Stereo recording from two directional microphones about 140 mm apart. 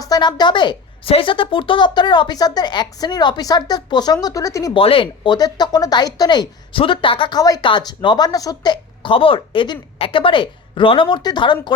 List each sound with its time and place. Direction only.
0.0 s speech: 30° left (ahead or behind)
4.7 s speech: 40° left (ahead or behind)